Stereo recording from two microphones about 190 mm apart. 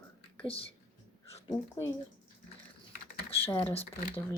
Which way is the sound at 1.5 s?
15° left (ahead or behind).